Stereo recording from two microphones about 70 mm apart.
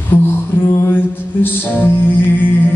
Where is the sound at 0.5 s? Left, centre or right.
Left.